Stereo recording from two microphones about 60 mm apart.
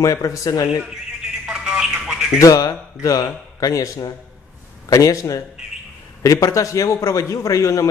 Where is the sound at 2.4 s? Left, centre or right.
Left.